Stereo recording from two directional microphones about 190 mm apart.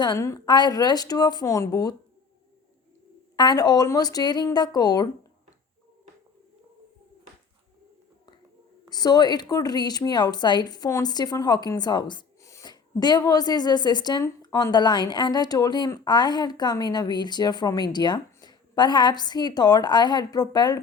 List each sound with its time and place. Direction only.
0.0 s speech: 15° left (ahead or behind)
3.3 s speech: 20° left (ahead or behind)
8.9 s speech: 20° left (ahead or behind)